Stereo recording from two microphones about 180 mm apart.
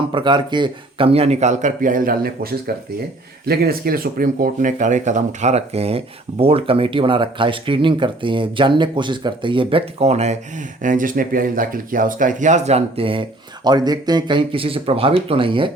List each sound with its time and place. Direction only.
0.1 s speech: 25° right (ahead or behind)
10.8 s speech: 50° right (ahead or behind); by 15.7 s 30° right (ahead or behind)